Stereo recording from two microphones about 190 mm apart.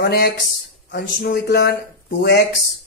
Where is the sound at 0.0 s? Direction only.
55° left (ahead or behind).